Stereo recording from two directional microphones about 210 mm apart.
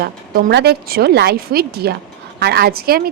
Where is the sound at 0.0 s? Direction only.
50° right (ahead or behind).